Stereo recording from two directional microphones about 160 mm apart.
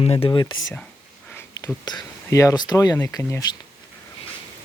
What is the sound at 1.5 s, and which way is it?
Speech, 20° left (ahead or behind).